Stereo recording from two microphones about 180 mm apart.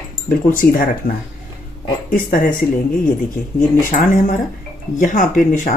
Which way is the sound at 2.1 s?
50° left (ahead or behind).